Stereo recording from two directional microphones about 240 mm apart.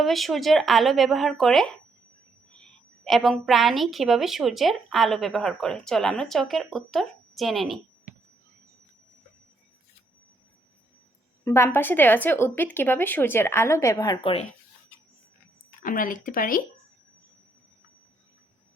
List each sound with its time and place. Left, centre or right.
0.0 s a woman's voice: centre
11.4 s speech: centre
15.8 s speech: left